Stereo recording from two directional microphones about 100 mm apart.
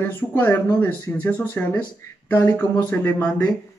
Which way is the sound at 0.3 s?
20° left (ahead or behind).